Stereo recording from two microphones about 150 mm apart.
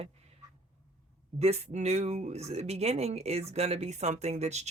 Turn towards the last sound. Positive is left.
turn(degrees=-50)  # may be behind; listen again after turning